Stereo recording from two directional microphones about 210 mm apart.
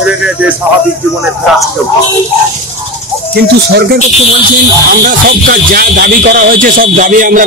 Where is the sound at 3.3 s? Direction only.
50° right (ahead or behind).